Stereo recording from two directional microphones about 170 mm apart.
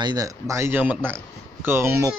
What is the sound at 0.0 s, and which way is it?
A man's voice, 20° right (ahead or behind).